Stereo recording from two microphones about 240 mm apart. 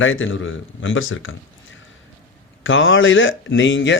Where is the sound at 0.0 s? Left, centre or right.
Left.